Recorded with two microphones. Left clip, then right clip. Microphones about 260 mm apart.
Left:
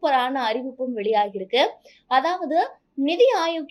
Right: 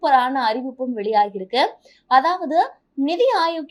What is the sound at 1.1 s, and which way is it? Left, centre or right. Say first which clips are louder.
A woman's voice: right 3 dB; right.